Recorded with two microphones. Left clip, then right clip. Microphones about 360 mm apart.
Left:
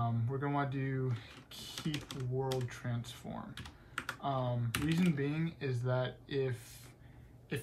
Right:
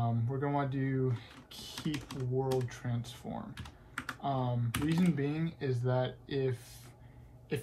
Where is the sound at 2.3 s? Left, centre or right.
Centre.